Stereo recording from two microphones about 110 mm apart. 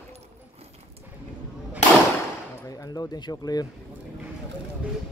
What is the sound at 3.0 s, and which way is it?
Speech, 35° left (ahead or behind).